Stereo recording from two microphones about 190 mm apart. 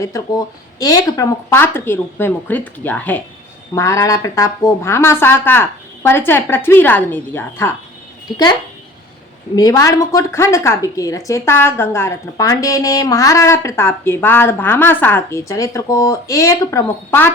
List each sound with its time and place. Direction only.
0.0 s a woman's voice: 20° left (ahead or behind)
9.6 s a woman's voice: 20° left (ahead or behind)